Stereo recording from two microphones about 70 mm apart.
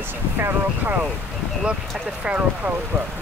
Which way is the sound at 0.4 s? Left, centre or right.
Right.